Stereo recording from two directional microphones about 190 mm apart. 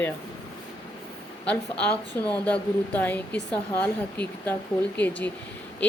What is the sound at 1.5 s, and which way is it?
Speech, 5° left (ahead or behind).